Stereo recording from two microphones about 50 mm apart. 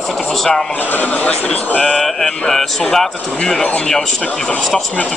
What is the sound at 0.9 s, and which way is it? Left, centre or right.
Speech, left.